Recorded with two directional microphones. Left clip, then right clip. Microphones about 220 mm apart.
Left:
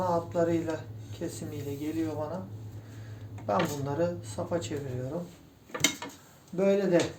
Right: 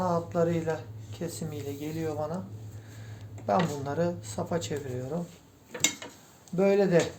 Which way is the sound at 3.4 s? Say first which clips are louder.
Right 2 dB; 55° right (ahead or behind).